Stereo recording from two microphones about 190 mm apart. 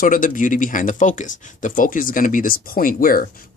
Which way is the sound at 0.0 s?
45° left (ahead or behind).